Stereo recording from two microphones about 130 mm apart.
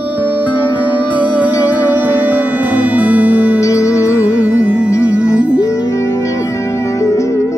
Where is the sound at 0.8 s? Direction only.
10° right (ahead or behind).